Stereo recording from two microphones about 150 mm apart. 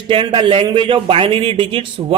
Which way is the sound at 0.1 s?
35° right (ahead or behind).